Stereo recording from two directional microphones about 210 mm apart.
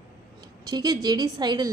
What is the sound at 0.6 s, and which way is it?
A woman's voice, 20° right (ahead or behind).